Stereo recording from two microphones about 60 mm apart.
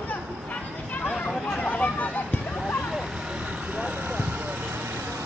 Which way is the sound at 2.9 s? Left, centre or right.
Centre.